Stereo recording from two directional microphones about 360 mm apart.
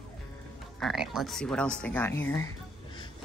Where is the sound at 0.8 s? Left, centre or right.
Centre.